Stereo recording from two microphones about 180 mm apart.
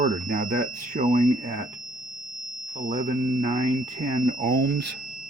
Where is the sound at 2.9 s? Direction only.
45° right (ahead or behind); by 4.9 s 70° right (ahead or behind).